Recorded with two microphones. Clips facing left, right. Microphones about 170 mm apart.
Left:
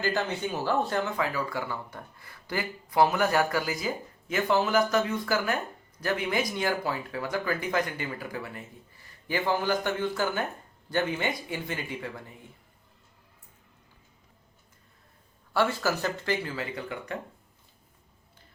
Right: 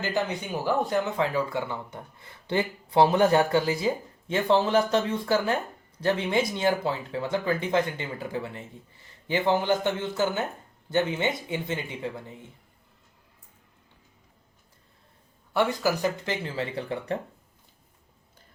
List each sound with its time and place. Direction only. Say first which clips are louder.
0.0 s speech: even; 15° right (ahead or behind)
15.5 s speech: right 2 dB; 15° right (ahead or behind)